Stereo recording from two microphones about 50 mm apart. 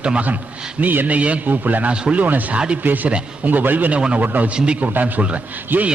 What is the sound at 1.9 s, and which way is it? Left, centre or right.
Speech, right.